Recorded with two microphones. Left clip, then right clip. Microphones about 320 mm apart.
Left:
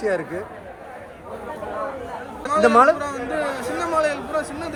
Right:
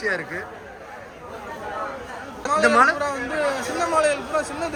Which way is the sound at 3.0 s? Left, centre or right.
Centre.